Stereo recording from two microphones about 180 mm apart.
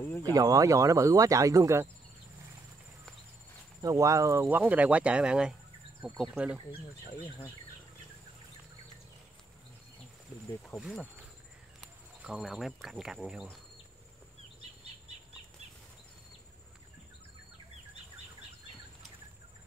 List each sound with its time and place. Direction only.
0.2 s speech: 20° right (ahead or behind)
3.8 s speech: 20° right (ahead or behind)
10.7 s insect: 5° right (ahead or behind)